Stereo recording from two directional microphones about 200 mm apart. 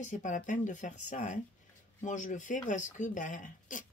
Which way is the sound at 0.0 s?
40° left (ahead or behind).